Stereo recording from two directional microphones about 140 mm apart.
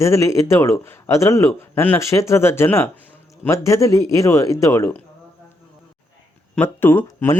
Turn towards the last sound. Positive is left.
turn(degrees=15)  # may be behind; listen again after turning